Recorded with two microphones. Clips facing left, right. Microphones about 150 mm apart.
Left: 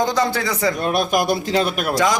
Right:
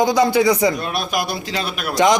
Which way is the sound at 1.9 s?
20° right (ahead or behind).